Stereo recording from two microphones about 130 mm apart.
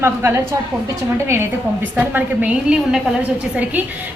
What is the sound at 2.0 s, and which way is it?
A woman's voice, 15° right (ahead or behind).